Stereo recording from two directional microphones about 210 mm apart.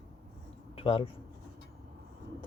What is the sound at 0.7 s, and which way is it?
Speech, 30° left (ahead or behind).